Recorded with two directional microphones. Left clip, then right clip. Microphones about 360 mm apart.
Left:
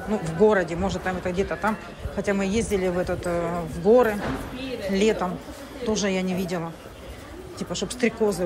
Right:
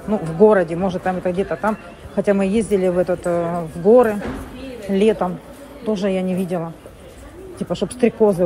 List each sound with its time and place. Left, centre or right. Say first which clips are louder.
0.1 s a man's voice: right 6 dB; centre